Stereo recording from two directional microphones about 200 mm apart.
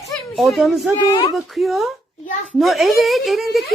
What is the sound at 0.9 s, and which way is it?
Speech, 20° left (ahead or behind).